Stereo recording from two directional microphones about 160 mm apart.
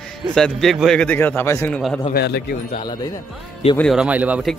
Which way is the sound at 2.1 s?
80° left.